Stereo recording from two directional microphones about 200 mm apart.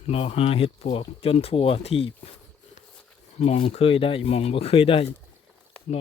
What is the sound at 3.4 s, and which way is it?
Speech, 30° left (ahead or behind).